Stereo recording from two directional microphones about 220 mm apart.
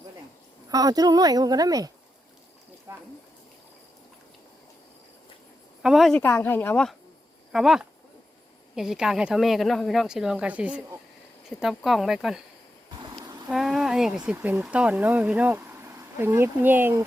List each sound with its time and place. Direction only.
0.7 s speech: 15° right (ahead or behind)
5.8 s speech: centre (ahead or behind)
13.0 s insect: 20° right (ahead or behind)
13.5 s a sound: centre (ahead or behind)
14.3 s speech: 10° right (ahead or behind)